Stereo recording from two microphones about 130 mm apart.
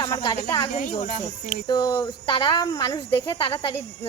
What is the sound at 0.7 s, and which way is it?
Speech, 90° left.